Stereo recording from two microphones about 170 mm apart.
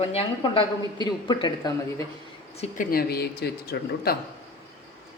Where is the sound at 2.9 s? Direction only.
65° left (ahead or behind).